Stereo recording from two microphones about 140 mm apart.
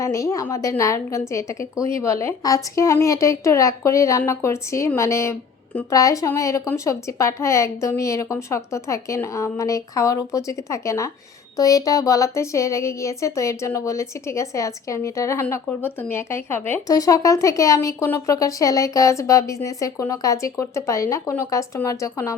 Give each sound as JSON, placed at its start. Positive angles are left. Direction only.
{"t": 0.0, "sound": "a woman's voice", "side_deg": 20}
{"t": 16.8, "sound": "a woman's voice", "side_deg": 25}